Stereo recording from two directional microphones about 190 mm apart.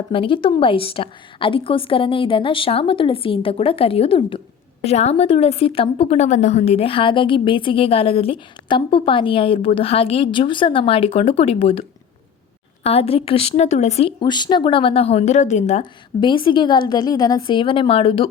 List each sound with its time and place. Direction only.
0.1 s a woman's voice: 25° left (ahead or behind)